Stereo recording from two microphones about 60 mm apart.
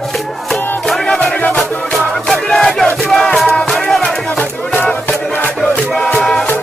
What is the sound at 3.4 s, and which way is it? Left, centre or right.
Music, centre.